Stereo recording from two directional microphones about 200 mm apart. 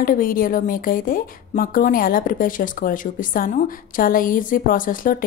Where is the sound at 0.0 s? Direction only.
45° left (ahead or behind).